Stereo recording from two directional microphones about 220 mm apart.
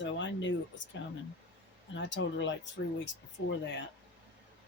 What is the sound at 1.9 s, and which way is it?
Speech, 55° left (ahead or behind).